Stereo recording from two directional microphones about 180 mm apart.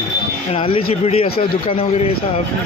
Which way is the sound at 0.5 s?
30° left (ahead or behind).